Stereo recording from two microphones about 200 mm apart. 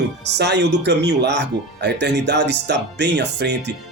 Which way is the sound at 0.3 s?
60° right (ahead or behind).